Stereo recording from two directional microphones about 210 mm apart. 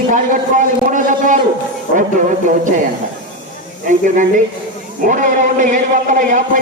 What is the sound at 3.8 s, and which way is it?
A man's voice, 40° right (ahead or behind).